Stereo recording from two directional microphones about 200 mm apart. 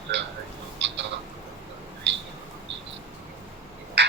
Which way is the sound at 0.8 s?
60° right (ahead or behind).